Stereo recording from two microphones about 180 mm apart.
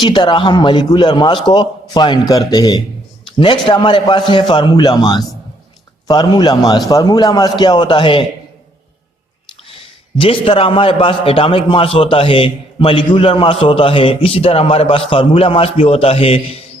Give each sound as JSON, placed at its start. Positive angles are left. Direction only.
{"t": 0.0, "sound": "a man's voice", "side_deg": 25}
{"t": 3.2, "sound": "a sound", "side_deg": 30}
{"t": 3.7, "sound": "a man's voice", "side_deg": 25}
{"t": 9.6, "sound": "a man's voice", "side_deg": 30}